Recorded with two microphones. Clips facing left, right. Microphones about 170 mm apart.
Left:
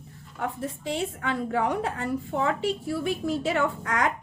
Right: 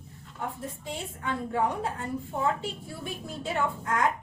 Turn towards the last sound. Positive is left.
turn(degrees=90)